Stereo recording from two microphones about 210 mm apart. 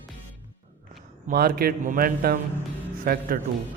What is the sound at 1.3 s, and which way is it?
Speech, 45° right (ahead or behind).